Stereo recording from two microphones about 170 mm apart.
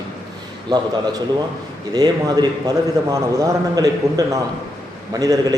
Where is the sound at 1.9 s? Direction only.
25° right (ahead or behind).